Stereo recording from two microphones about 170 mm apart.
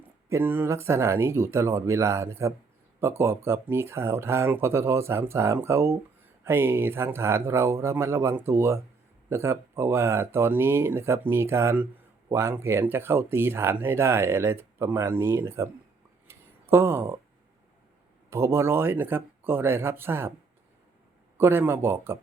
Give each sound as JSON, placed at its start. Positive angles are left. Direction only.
{"t": 0.3, "sound": "speech", "side_deg": -15}
{"t": 16.2, "sound": "a sound", "side_deg": -15}
{"t": 18.3, "sound": "speech", "side_deg": -15}
{"t": 21.3, "sound": "speech", "side_deg": -15}